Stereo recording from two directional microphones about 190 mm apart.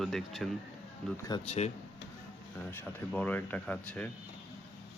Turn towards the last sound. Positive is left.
turn(degrees=5)  # may be behind; listen again after turning